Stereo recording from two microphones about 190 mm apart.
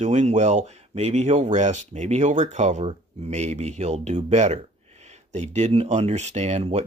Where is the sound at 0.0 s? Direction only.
40° right (ahead or behind).